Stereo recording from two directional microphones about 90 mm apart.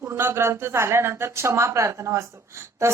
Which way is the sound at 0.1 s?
25° right (ahead or behind).